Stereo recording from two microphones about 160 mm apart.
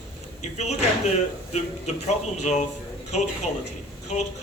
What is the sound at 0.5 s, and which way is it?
A man's voice, 45° left (ahead or behind).